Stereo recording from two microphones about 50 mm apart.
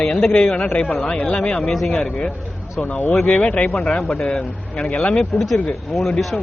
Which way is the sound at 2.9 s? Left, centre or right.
Left.